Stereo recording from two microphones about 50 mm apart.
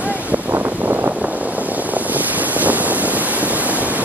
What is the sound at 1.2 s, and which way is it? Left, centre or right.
Waves, right.